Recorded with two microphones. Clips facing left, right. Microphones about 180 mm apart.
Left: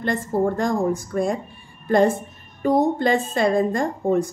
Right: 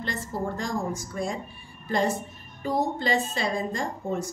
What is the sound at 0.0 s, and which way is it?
A woman's voice, 55° left (ahead or behind).